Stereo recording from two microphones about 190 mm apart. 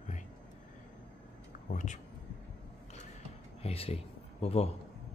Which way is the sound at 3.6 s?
30° left (ahead or behind).